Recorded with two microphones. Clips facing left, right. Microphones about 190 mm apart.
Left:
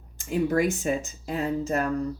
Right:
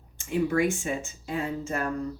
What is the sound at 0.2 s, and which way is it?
Speech, 40° left (ahead or behind).